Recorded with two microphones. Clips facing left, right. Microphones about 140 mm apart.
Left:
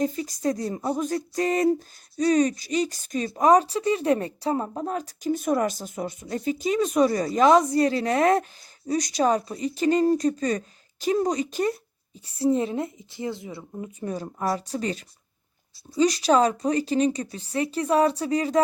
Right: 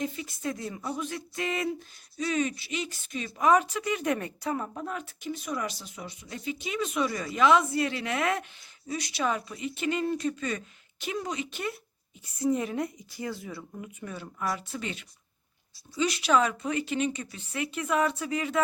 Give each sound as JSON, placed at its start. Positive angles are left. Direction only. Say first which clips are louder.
{"t": 0.0, "sound": "speech", "louder": "left 8 dB", "side_deg": 40}